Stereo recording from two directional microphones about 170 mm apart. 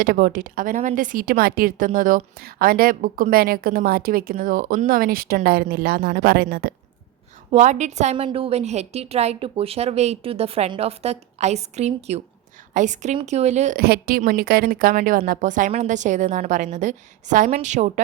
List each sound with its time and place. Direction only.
0.0 s speech: 55° right (ahead or behind)
7.5 s a woman's voice: 45° right (ahead or behind)
13.7 s a woman's voice: 65° right (ahead or behind); by 18.0 s 45° right (ahead or behind)